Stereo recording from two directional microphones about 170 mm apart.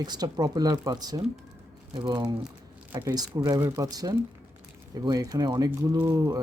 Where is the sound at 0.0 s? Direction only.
25° right (ahead or behind).